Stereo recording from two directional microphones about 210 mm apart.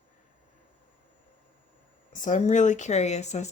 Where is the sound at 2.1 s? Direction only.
35° left (ahead or behind).